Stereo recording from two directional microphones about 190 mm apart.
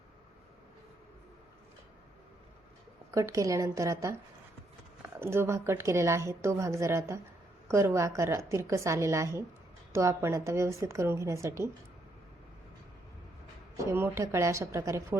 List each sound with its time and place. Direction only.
3.1 s a woman's voice: 15° right (ahead or behind)
5.2 s a woman's voice: 10° right (ahead or behind)
13.7 s a woman's voice: 15° right (ahead or behind)